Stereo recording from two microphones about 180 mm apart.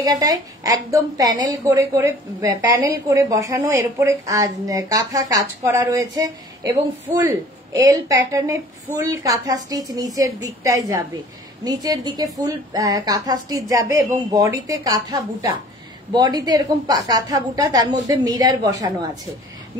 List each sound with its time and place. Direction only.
0.0 s a woman's voice: 20° right (ahead or behind)